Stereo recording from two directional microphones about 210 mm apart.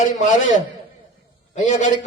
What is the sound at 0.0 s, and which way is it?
Speech, 35° left (ahead or behind).